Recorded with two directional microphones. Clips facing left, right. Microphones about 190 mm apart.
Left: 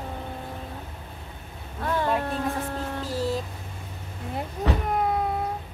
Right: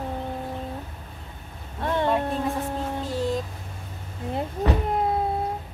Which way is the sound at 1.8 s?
25° right (ahead or behind).